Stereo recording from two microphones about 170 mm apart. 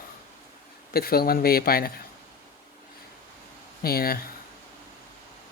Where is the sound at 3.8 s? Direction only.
60° left (ahead or behind).